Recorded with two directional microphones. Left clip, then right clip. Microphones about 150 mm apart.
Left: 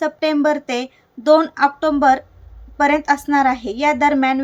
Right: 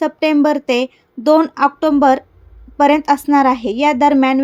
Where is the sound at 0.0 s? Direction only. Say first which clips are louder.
Right 3 dB; 30° right (ahead or behind).